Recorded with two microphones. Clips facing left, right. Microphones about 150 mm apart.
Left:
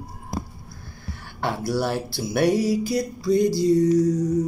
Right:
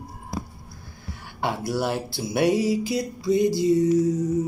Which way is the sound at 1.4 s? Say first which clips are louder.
Left 1 dB; 20° right (ahead or behind).